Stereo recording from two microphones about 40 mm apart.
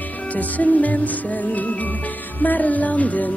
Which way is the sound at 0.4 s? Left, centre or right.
Left.